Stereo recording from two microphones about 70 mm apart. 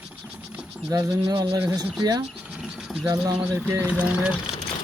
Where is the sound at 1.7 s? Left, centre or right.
Right.